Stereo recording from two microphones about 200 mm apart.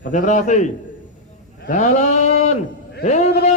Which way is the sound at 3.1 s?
35° left (ahead or behind).